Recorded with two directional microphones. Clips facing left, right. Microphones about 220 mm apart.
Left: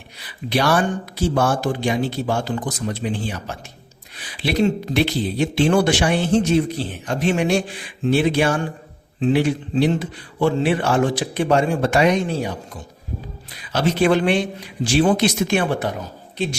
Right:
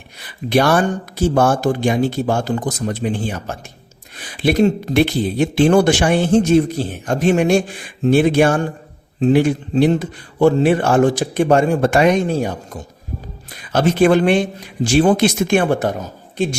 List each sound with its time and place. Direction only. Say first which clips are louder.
0.2 s speech: right 5 dB; 50° right (ahead or behind)